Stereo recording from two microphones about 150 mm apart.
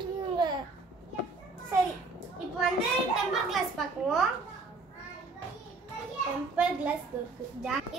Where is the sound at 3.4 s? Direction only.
Centre (ahead or behind).